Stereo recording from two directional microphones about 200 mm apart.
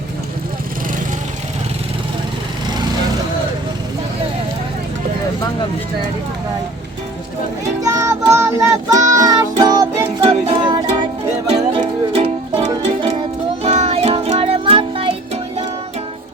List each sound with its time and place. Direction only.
7.8 s music: 15° right (ahead or behind)